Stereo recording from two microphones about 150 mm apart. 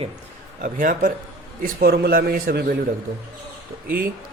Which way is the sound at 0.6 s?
65° right (ahead or behind).